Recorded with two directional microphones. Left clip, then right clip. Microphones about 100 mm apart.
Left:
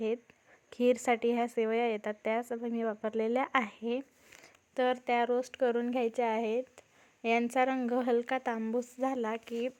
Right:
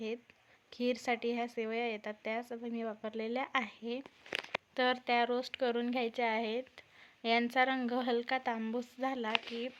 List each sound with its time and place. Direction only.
0.8 s speech: 60° left (ahead or behind)
4.3 s a woman's voice: 25° left (ahead or behind); by 9.7 s 50° left (ahead or behind)